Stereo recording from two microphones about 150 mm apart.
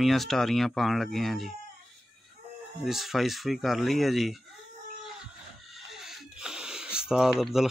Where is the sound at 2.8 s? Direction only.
Centre (ahead or behind).